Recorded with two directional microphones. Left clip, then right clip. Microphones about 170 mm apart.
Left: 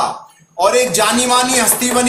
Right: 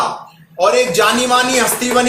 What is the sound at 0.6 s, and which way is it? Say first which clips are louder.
Speech: right 1 dB; 35° left (ahead or behind).